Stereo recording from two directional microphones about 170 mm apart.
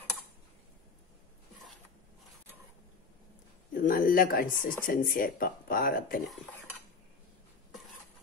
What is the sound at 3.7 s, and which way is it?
Speech, 55° left (ahead or behind).